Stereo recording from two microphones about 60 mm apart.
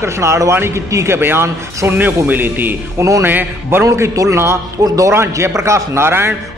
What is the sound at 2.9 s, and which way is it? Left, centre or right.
Speech, right.